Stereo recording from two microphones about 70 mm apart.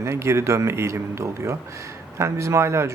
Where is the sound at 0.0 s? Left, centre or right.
Right.